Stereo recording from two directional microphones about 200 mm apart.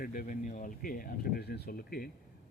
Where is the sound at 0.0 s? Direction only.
45° left (ahead or behind).